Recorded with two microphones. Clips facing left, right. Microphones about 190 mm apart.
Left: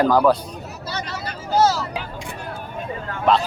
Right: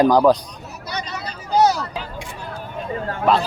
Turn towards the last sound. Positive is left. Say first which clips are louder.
# even
turn(degrees=-5)  # may be behind; listen again after turning